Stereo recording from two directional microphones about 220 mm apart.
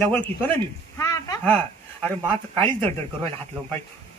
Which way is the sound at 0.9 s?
15° left (ahead or behind).